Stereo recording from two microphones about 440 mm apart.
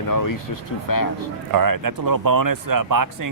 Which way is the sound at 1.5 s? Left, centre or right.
Right.